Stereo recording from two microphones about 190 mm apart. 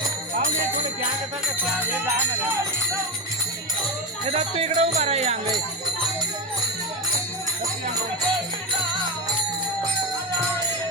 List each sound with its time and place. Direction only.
4.3 s music: 35° right (ahead or behind)